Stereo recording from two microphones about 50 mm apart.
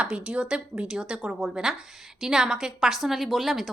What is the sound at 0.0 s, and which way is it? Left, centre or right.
A woman's voice, centre.